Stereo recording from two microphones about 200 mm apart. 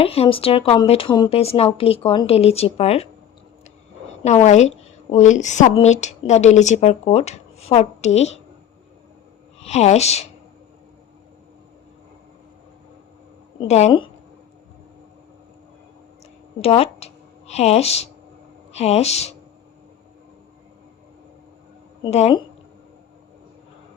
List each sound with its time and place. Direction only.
0.0 s speech: 30° left (ahead or behind)
4.2 s speech: 35° left (ahead or behind)
9.6 s speech: 30° left (ahead or behind)
13.6 s speech: 35° left (ahead or behind)
16.6 s speech: 30° left (ahead or behind)
22.0 s speech: 30° left (ahead or behind)